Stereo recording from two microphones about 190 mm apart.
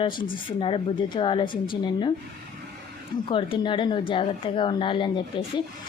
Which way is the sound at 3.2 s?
25° left (ahead or behind).